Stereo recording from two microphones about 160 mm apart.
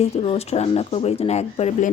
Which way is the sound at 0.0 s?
40° left (ahead or behind).